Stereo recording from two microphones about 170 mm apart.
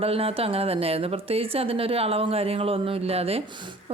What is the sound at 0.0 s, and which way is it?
Speech, 35° right (ahead or behind).